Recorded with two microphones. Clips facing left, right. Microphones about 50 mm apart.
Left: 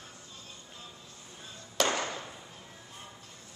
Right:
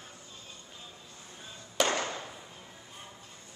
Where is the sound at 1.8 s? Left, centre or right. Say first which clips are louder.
Even; centre.